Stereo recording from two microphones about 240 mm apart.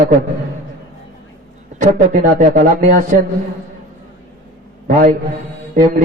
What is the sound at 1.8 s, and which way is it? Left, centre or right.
Speech, right.